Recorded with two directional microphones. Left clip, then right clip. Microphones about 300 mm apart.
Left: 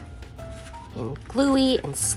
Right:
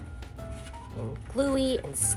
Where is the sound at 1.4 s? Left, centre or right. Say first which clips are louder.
Left 5 dB; left.